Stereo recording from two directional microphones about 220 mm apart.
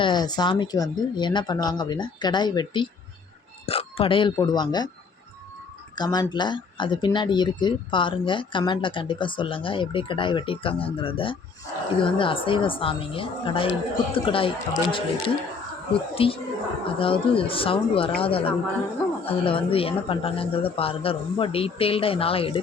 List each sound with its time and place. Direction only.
0.0 s speech: 20° left (ahead or behind)
6.0 s speech: 20° left (ahead or behind)